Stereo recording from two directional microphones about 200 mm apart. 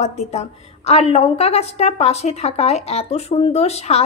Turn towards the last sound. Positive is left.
turn(degrees=30)  # may be behind; listen again after turning